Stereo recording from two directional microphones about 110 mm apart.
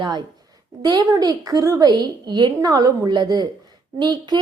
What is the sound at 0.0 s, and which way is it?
A woman's voice, 45° right (ahead or behind).